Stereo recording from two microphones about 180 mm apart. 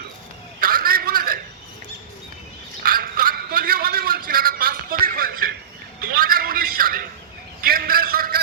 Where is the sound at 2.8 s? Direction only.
55° right (ahead or behind).